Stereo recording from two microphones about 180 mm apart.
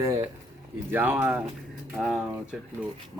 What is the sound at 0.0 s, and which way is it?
Speech, 20° right (ahead or behind).